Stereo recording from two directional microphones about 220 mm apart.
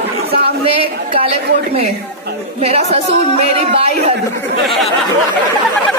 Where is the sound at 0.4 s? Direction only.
25° right (ahead or behind).